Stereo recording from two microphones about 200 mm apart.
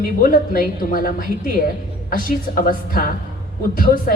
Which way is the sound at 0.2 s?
45° left (ahead or behind).